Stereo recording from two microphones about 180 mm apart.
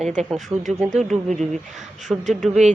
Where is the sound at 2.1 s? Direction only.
10° right (ahead or behind).